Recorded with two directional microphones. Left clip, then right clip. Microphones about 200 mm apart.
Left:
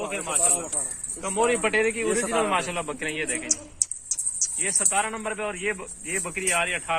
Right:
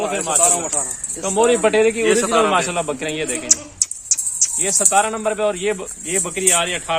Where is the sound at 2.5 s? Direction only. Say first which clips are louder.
Right 7 dB; 35° right (ahead or behind).